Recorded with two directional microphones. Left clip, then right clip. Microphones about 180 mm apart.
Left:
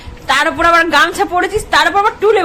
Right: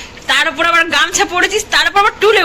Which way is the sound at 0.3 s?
25° left (ahead or behind).